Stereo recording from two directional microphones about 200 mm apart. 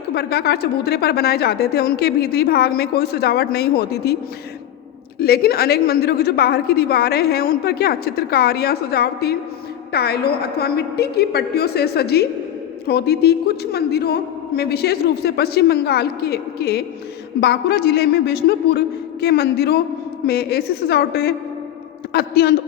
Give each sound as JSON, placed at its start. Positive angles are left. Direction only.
{"t": 0.1, "sound": "a woman's voice", "side_deg": 50}
{"t": 5.2, "sound": "a woman's voice", "side_deg": 50}